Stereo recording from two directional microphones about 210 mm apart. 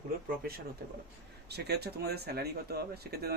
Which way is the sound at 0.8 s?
45° right (ahead or behind).